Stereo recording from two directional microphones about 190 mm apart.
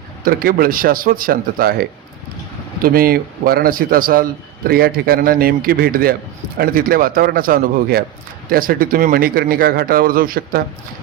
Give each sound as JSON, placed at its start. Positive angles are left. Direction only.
{"t": 0.3, "sound": "a man's voice", "side_deg": -50}